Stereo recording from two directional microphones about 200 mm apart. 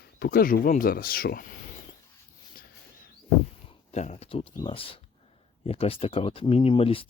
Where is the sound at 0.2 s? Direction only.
50° left (ahead or behind).